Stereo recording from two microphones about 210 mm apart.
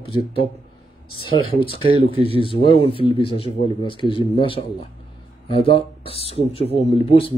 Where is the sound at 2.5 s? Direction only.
25° left (ahead or behind).